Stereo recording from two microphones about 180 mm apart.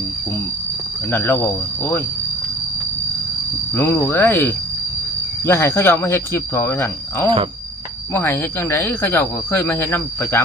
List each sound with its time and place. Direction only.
1.1 s speech: 10° left (ahead or behind)
3.8 s speech: 10° left (ahead or behind)